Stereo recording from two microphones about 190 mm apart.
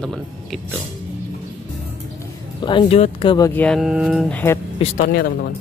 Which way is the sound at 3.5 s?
5° left (ahead or behind).